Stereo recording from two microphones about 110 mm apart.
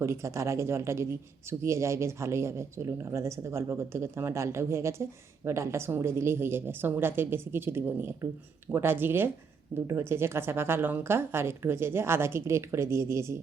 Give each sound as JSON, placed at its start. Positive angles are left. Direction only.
{"t": 0.0, "sound": "speech", "side_deg": -25}